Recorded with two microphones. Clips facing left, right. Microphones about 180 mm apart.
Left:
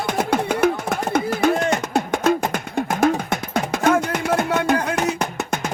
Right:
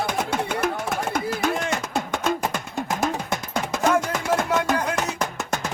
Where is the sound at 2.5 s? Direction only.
65° left (ahead or behind).